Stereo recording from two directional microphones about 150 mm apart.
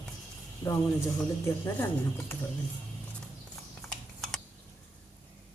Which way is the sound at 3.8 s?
Centre (ahead or behind).